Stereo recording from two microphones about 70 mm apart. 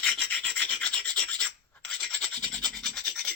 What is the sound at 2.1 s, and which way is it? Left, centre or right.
Toothbrush, centre.